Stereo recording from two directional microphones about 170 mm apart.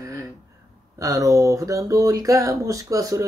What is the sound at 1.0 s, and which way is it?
Speech, 20° right (ahead or behind).